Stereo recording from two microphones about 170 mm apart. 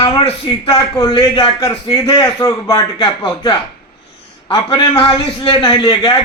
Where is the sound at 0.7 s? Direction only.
20° left (ahead or behind).